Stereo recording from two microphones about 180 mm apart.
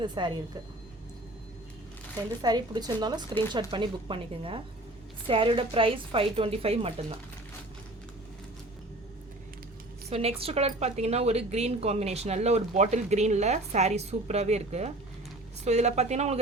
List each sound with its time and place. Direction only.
0.0 s speech: 25° right (ahead or behind)
2.4 s a woman's voice: 20° right (ahead or behind)
10.1 s a woman's voice: 35° right (ahead or behind)